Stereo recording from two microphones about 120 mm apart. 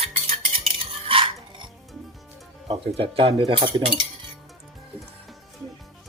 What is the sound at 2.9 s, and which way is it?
Speech, 50° right (ahead or behind).